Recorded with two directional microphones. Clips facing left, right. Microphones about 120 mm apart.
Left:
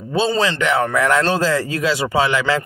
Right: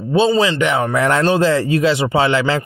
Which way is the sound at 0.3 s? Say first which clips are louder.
Right 3 dB; 15° right (ahead or behind).